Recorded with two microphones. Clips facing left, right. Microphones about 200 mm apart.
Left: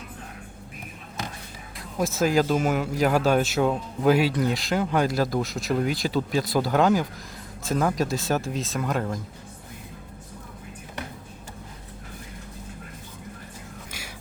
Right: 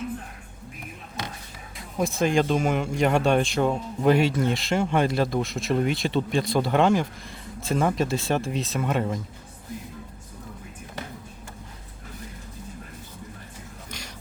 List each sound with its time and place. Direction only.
1.8 s speech: centre (ahead or behind)